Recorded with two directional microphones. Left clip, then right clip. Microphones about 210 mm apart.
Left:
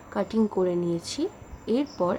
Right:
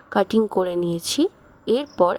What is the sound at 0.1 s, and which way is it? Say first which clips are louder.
A woman's voice: right 7 dB; 45° right (ahead or behind).